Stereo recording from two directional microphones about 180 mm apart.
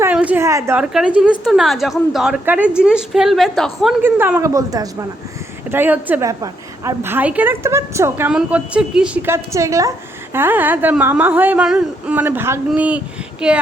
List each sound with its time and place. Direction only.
0.0 s a woman's voice: 10° right (ahead or behind)
4.0 s a woman's voice: 10° right (ahead or behind)